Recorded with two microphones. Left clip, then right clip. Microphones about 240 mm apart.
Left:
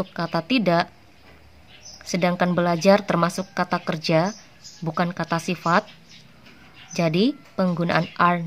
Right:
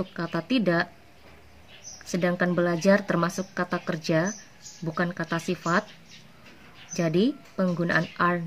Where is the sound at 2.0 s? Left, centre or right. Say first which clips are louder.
Left 4 dB; left.